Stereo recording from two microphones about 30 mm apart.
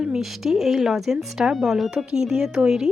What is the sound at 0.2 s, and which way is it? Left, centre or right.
Speech, centre.